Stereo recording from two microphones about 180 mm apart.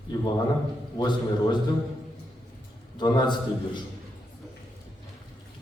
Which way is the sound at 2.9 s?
25° left (ahead or behind).